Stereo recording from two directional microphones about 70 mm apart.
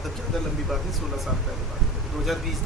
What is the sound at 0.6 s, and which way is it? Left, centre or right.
Speech, centre.